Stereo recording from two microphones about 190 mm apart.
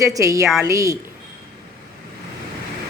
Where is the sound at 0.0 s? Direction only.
15° right (ahead or behind).